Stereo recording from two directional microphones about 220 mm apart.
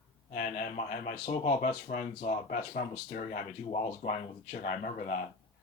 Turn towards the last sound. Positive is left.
turn(degrees=35)  # may be behind; listen again after turning